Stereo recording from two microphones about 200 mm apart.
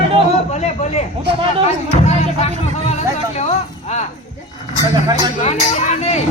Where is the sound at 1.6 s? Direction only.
30° left (ahead or behind).